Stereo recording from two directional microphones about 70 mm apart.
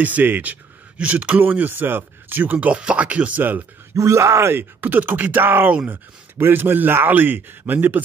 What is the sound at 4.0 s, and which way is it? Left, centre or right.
Speech, right.